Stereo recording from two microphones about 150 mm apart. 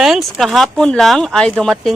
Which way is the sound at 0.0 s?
Centre (ahead or behind).